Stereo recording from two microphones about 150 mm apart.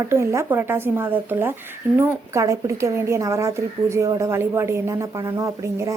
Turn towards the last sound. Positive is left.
turn(degrees=-20)  # may be behind; listen again after turning